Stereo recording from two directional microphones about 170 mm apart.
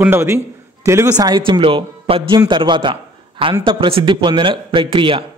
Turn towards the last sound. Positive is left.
turn(degrees=-30)  # may be behind; listen again after turning